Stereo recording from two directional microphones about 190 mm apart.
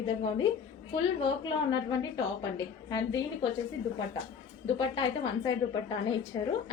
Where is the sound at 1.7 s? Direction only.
25° left (ahead or behind).